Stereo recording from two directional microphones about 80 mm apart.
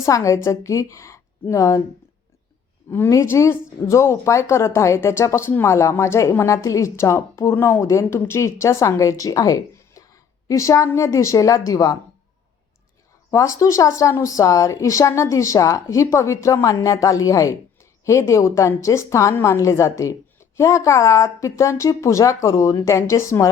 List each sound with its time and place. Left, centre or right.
0.0 s speech: left
3.1 s a woman's voice: left
13.3 s speech: left